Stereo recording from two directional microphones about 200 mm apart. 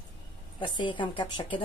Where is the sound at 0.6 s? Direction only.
25° left (ahead or behind).